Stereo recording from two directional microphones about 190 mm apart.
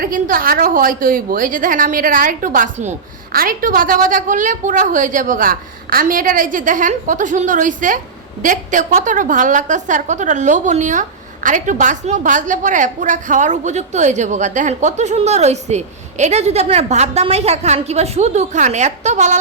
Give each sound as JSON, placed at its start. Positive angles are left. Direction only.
{"t": 0.0, "sound": "a woman's voice", "side_deg": -50}